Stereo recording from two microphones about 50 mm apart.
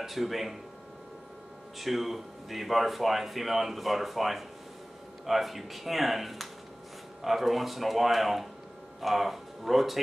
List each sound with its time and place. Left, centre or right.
0.0 s a man's voice: centre
1.8 s a man's voice: centre